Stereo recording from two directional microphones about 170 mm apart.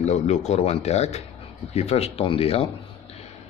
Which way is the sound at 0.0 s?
40° left (ahead or behind).